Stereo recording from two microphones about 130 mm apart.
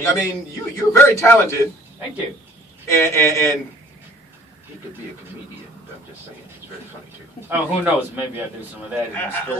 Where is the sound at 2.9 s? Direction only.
20° left (ahead or behind).